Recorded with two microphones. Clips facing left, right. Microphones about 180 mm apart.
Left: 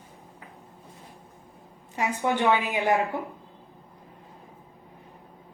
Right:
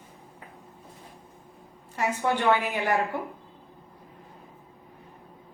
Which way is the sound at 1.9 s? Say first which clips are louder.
Left 1 dB; 15° left (ahead or behind).